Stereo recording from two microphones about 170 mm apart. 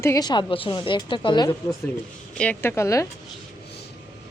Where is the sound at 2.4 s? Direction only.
10° left (ahead or behind).